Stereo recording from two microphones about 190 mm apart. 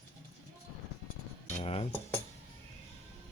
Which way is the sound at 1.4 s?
35° left (ahead or behind).